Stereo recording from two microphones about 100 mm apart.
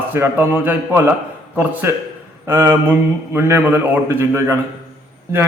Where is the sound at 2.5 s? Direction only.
25° right (ahead or behind).